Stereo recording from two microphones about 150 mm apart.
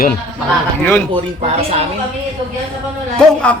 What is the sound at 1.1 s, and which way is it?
Speech, 45° right (ahead or behind).